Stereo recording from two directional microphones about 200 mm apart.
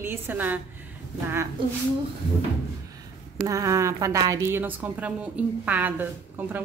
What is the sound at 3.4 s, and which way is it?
A woman's voice, 15° right (ahead or behind).